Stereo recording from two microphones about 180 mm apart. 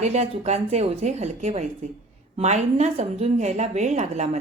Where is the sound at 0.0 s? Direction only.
40° right (ahead or behind).